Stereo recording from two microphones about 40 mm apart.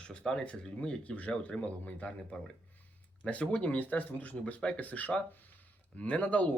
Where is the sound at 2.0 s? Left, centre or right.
Left.